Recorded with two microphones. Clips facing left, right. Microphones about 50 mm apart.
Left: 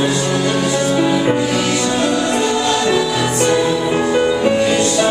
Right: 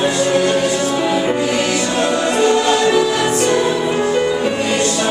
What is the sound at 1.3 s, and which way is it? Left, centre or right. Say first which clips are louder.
Music: even; centre.